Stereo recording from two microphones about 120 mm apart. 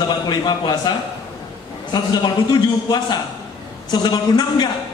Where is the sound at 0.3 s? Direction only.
35° left (ahead or behind).